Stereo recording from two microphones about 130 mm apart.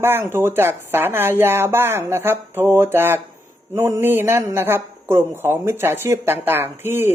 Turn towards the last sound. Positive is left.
turn(degrees=-20)  # may be behind; listen again after turning